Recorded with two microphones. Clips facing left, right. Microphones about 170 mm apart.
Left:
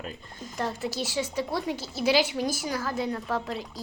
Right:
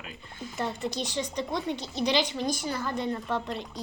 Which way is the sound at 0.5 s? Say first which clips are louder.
Left 1 dB; centre (ahead or behind).